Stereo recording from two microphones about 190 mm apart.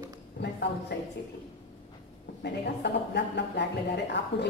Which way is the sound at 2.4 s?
60° left (ahead or behind).